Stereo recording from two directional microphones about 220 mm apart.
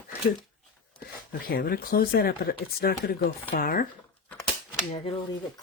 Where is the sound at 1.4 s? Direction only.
40° left (ahead or behind).